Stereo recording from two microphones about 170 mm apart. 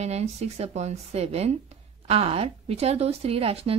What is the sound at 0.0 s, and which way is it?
Speech, 40° right (ahead or behind).